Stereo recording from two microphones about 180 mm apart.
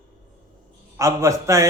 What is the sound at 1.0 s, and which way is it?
Speech, 15° right (ahead or behind).